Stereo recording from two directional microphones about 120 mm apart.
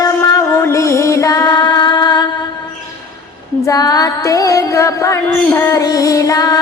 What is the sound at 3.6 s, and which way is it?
Female singing, 30° left (ahead or behind).